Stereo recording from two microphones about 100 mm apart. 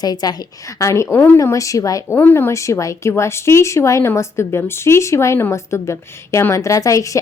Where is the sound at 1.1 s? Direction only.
20° left (ahead or behind).